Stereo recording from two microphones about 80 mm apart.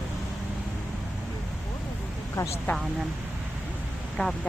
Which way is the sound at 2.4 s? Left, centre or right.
Left.